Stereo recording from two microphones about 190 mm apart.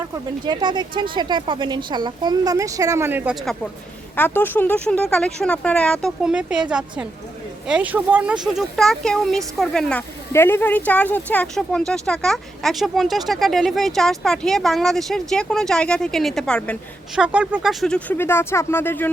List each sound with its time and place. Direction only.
0.4 s speech: 25° right (ahead or behind)
3.4 s speech: centre (ahead or behind)
17.2 s speech: 5° right (ahead or behind); by 19.1 s 10° left (ahead or behind)